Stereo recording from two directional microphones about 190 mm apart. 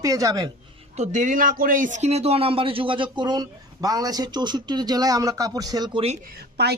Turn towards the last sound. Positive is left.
turn(degrees=-60)  # may be behind; listen again after turning